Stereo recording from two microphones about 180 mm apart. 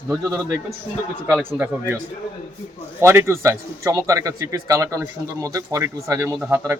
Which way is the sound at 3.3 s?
15° right (ahead or behind).